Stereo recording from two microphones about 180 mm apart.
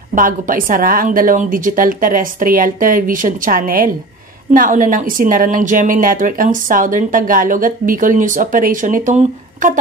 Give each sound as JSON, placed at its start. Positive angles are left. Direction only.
{"t": 0.1, "sound": "speech", "side_deg": -50}